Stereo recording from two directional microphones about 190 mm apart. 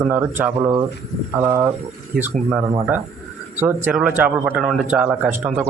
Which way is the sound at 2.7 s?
15° right (ahead or behind).